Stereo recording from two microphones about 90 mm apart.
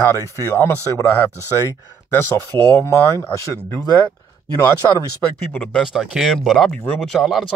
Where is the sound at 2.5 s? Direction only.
20° left (ahead or behind).